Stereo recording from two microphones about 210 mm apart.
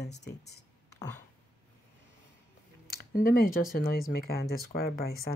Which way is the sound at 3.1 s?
40° left (ahead or behind).